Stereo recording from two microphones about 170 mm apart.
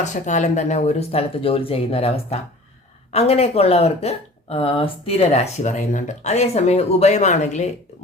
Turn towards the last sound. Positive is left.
turn(degrees=45)  # may be behind; listen again after turning